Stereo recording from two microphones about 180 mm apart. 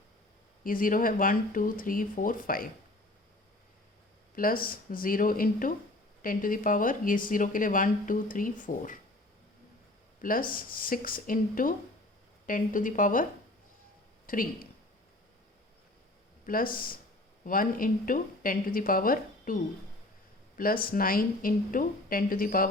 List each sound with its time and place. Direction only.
0.6 s speech: 50° left (ahead or behind)
4.4 s speech: 50° left (ahead or behind)
10.2 s speech: 50° left (ahead or behind)
14.3 s speech: 50° left (ahead or behind)
16.5 s speech: 50° left (ahead or behind)
20.6 s speech: 50° left (ahead or behind)